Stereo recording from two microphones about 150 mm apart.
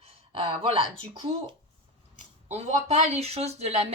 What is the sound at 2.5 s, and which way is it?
Speech, 45° right (ahead or behind).